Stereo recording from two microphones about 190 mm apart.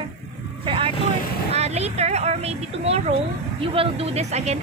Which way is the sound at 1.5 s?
35° right (ahead or behind).